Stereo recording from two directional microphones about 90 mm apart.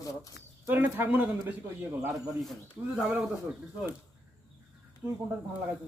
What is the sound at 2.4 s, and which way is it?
Speech, centre (ahead or behind).